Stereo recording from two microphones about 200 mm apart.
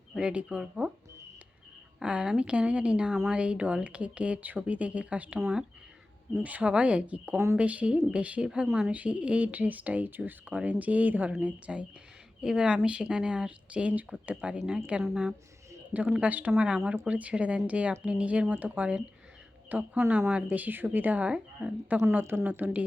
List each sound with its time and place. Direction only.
0.1 s speech: 5° right (ahead or behind)
2.0 s speech: 5° right (ahead or behind)